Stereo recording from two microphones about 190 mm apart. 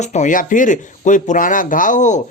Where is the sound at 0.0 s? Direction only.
40° left (ahead or behind).